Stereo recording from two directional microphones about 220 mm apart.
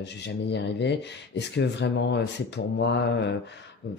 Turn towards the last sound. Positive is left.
turn(degrees=50)  # may be behind; listen again after turning